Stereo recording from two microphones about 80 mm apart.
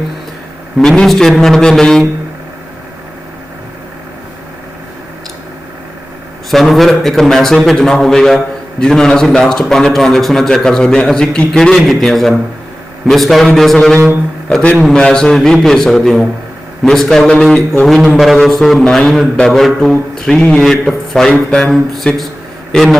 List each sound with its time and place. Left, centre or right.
0.8 s a man's voice: centre
6.5 s a man's voice: centre
14.5 s a man's voice: centre